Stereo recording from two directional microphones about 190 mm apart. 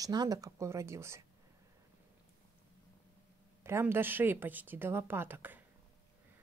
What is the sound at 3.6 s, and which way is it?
Speech, 10° right (ahead or behind).